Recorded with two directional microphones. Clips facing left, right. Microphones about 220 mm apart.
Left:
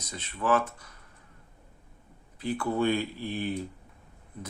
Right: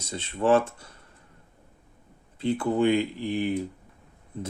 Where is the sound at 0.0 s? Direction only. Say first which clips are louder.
Right 6 dB; 30° right (ahead or behind).